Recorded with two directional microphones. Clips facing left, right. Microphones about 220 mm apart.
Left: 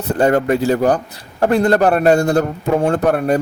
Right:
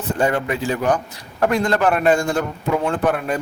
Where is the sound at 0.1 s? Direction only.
40° left (ahead or behind).